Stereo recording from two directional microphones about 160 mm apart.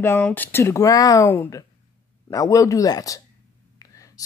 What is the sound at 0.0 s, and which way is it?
Speech, 15° left (ahead or behind).